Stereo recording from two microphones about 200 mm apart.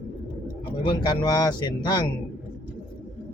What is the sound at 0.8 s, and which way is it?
Speech, 20° left (ahead or behind).